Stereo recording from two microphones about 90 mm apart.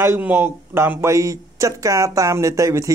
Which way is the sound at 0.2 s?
20° right (ahead or behind).